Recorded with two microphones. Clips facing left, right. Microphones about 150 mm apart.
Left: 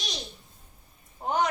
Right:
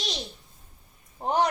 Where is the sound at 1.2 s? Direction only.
30° right (ahead or behind).